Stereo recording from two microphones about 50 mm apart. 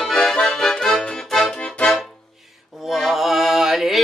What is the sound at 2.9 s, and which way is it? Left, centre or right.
Music, centre.